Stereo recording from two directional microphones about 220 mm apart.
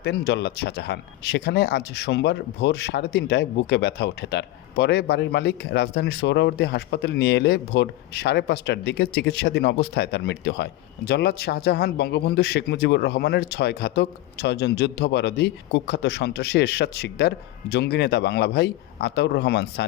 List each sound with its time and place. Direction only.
0.0 s speech: 45° left (ahead or behind)